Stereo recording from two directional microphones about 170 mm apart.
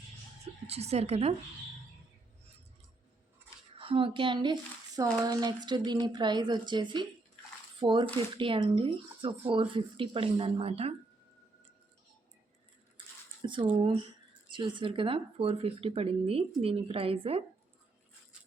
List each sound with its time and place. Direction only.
0.7 s speech: 40° right (ahead or behind)
3.8 s a woman's voice: 30° right (ahead or behind)
13.4 s speech: 30° right (ahead or behind)